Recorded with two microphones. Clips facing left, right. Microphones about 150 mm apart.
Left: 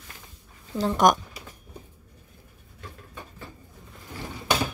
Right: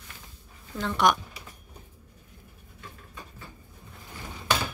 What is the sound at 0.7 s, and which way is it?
Speech, 40° left (ahead or behind).